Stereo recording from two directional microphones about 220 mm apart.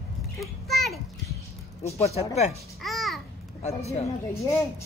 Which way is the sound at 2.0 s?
30° left (ahead or behind).